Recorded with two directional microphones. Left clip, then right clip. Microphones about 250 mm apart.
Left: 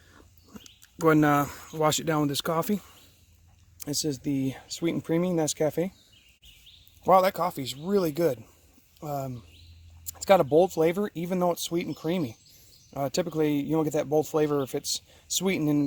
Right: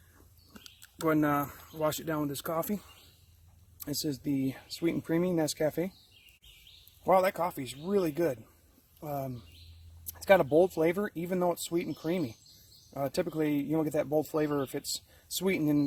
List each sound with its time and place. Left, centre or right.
1.0 s speech: left
3.8 s speech: left
7.0 s a man's voice: left